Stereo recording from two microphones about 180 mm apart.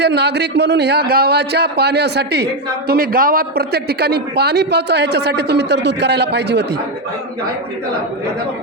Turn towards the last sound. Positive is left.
turn(degrees=-70)  # may be behind; listen again after turning